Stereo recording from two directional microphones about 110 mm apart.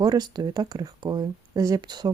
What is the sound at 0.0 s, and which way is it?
Speech, 40° right (ahead or behind).